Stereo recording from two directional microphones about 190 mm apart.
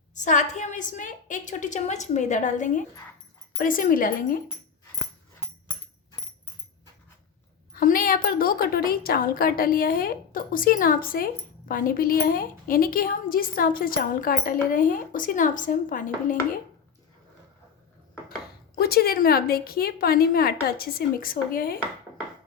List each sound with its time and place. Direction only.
0.1 s a woman's voice: 40° left (ahead or behind)
7.7 s a woman's voice: 50° left (ahead or behind)
18.8 s a woman's voice: 55° left (ahead or behind)